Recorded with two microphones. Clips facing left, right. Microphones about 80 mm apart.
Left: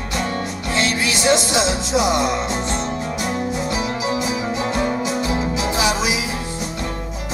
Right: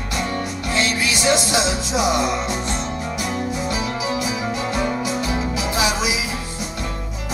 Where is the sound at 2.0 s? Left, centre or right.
Centre.